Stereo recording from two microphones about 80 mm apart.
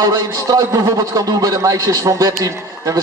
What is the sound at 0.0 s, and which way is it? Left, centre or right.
A man's voice, right.